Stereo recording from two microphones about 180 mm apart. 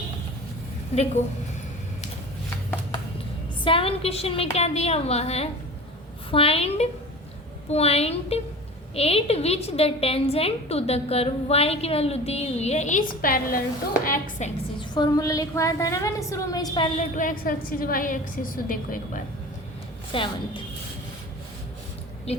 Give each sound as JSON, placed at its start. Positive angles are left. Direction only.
{"t": 3.6, "sound": "a woman's voice", "side_deg": 30}
{"t": 14.8, "sound": "a woman's voice", "side_deg": 20}
{"t": 17.2, "sound": "a woman's voice", "side_deg": 50}
{"t": 20.1, "sound": "a woman's voice", "side_deg": 30}
{"t": 22.3, "sound": "speech", "side_deg": 35}